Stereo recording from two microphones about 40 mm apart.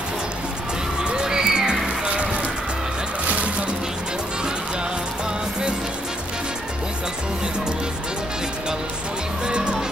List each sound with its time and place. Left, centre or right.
1.0 s music: centre
2.0 s music: right
9.5 s music: centre